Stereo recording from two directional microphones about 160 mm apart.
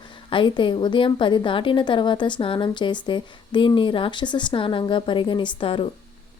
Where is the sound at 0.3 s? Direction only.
30° left (ahead or behind).